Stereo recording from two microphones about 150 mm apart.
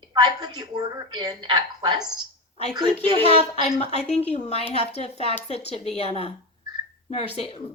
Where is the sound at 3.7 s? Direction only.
45° left (ahead or behind).